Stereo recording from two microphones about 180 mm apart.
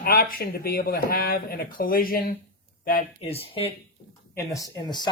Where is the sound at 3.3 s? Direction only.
30° left (ahead or behind).